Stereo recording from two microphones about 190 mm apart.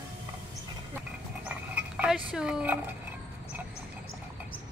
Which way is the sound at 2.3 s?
5° right (ahead or behind).